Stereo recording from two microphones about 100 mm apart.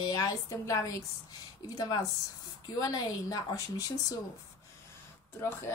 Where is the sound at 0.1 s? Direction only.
35° left (ahead or behind).